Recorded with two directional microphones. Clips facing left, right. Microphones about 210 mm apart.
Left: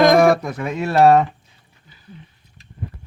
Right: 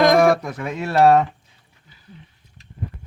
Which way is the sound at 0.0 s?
15° left (ahead or behind).